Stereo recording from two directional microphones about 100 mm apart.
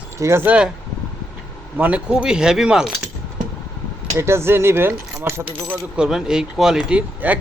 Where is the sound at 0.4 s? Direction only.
10° right (ahead or behind).